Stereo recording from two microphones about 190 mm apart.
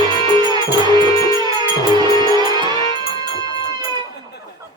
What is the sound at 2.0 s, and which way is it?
Music, 25° right (ahead or behind).